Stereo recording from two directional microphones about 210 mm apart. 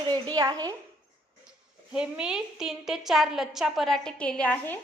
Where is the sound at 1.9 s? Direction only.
5° right (ahead or behind).